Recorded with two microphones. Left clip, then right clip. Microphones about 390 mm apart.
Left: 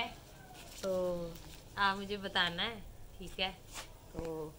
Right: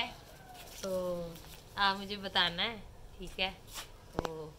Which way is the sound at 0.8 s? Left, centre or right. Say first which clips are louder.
Left 1 dB; centre.